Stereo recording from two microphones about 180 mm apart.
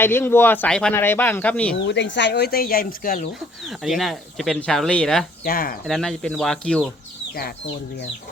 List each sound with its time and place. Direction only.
0.0 s speech: 10° left (ahead or behind)
1.7 s speech: 80° left; by 3.2 s 50° left (ahead or behind)
3.8 s speech: centre (ahead or behind)
5.5 s speech: 55° left (ahead or behind)
5.8 s speech: 5° left (ahead or behind)